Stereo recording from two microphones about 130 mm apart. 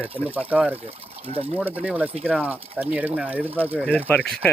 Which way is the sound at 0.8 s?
50° right (ahead or behind).